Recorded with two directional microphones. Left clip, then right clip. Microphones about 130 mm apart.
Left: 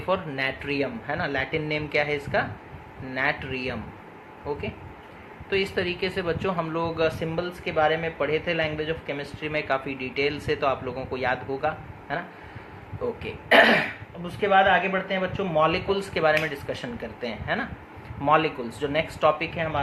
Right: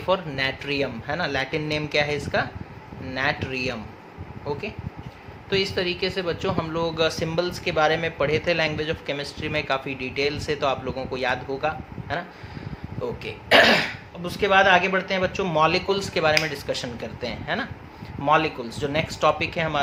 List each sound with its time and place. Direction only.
0.1 s speech: 20° right (ahead or behind)
5.5 s speech: 20° right (ahead or behind)
9.4 s speech: 20° right (ahead or behind)
13.2 s speech: 25° right (ahead or behind)
14.3 s a man's voice: 50° right (ahead or behind)
15.9 s speech: 30° right (ahead or behind)